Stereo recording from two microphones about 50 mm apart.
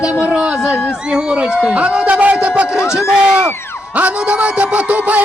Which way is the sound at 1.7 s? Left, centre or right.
Right.